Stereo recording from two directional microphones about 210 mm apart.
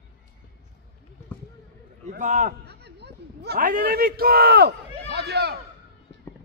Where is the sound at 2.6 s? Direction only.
50° right (ahead or behind).